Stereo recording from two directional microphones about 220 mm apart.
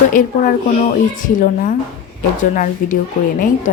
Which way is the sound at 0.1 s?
40° left (ahead or behind).